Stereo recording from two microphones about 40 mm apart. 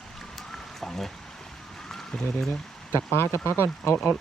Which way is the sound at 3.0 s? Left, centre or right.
Left.